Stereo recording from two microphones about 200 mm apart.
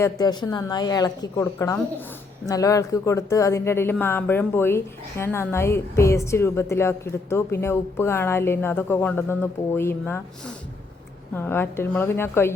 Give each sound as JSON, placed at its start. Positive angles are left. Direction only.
{"t": 0.0, "sound": "a woman's voice", "side_deg": 20}
{"t": 11.3, "sound": "speech", "side_deg": 10}